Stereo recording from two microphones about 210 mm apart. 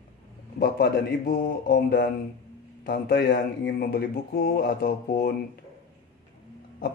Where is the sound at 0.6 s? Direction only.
50° left (ahead or behind).